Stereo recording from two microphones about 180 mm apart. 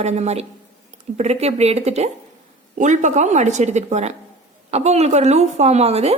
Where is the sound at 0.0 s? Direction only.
40° right (ahead or behind).